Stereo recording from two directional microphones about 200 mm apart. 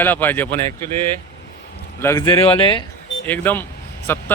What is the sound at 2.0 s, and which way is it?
Speech, 15° left (ahead or behind).